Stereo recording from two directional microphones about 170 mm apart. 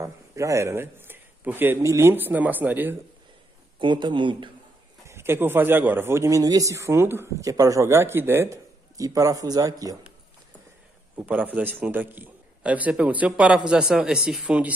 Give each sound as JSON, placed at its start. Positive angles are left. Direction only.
{"t": 0.0, "sound": "a man's voice", "side_deg": -20}
{"t": 3.8, "sound": "speech", "side_deg": -30}
{"t": 5.0, "sound": "a man's voice", "side_deg": -15}
{"t": 11.1, "sound": "a man's voice", "side_deg": -10}